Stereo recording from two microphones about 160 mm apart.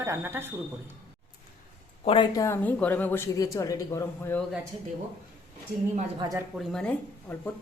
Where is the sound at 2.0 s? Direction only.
30° left (ahead or behind).